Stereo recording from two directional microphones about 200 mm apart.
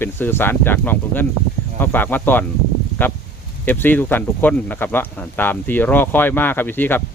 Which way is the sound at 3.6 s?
10° left (ahead or behind).